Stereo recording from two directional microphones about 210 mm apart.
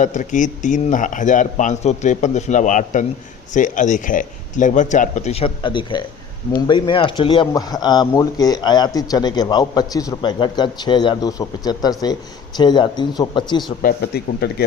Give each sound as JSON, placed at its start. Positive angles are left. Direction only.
{"t": 0.0, "sound": "speech", "side_deg": 35}
{"t": 13.8, "sound": "speech", "side_deg": 50}